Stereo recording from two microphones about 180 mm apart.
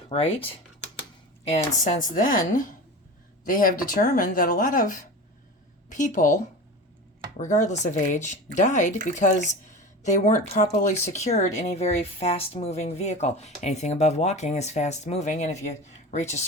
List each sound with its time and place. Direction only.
0.1 s speech: 30° left (ahead or behind)